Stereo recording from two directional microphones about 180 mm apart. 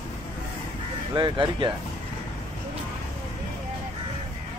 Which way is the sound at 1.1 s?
25° right (ahead or behind).